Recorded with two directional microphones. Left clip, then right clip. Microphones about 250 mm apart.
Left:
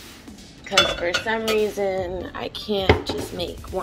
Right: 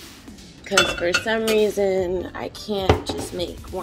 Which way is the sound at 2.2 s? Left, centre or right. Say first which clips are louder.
Even; centre.